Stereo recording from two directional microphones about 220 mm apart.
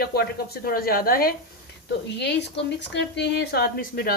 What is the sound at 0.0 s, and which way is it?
Speech, 45° left (ahead or behind).